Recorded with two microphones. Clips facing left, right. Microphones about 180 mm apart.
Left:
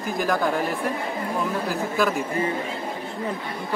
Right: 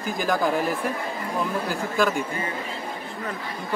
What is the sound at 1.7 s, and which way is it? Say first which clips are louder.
Speech: even; centre (ahead or behind).